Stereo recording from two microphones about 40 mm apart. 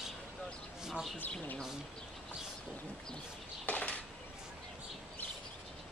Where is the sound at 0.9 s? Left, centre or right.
Centre.